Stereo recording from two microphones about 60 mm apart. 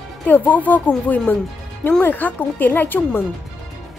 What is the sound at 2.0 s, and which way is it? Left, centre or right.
Speech, left.